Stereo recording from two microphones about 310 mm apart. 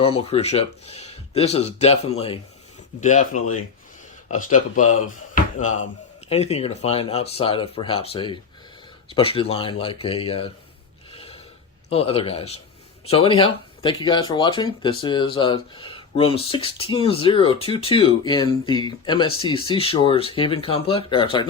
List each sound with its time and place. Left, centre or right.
0.0 s speech: centre
4.3 s speech: left
4.9 s a sound: left
6.2 s speech: centre
11.1 s a sound: centre
11.9 s speech: centre